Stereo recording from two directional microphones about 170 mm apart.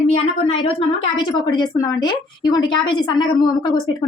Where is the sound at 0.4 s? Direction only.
30° left (ahead or behind).